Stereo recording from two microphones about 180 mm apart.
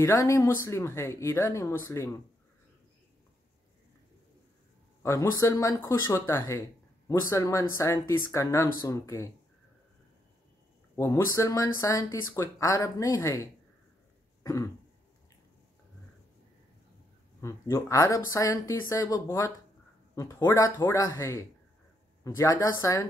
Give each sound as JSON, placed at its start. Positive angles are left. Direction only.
{"t": 0.0, "sound": "speech", "side_deg": 15}
{"t": 5.0, "sound": "speech", "side_deg": 15}
{"t": 11.0, "sound": "speech", "side_deg": 15}
{"t": 14.4, "sound": "throat clearing", "side_deg": 20}
{"t": 17.4, "sound": "speech", "side_deg": 15}